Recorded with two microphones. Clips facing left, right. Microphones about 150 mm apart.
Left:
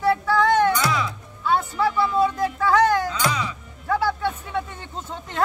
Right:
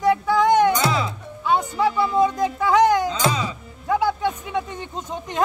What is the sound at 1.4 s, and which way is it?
Music, 15° right (ahead or behind).